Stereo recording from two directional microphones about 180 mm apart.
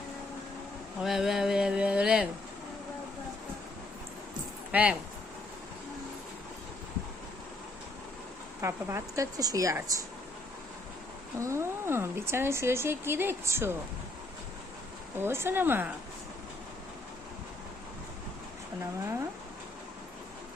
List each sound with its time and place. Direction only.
1.0 s a sound: centre (ahead or behind)
4.7 s speech: 5° right (ahead or behind)
8.6 s speech: 15° right (ahead or behind)
11.3 s speech: 15° right (ahead or behind)
15.2 s speech: 15° right (ahead or behind)